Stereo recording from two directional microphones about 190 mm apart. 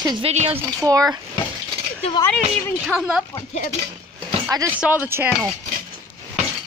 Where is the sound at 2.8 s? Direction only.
5° right (ahead or behind).